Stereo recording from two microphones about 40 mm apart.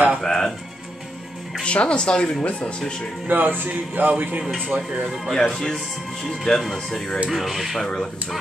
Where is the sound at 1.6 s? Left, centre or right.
Left.